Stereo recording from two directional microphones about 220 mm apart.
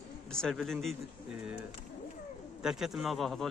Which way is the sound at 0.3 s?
5° left (ahead or behind).